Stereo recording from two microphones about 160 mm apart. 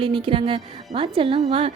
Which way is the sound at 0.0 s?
30° right (ahead or behind).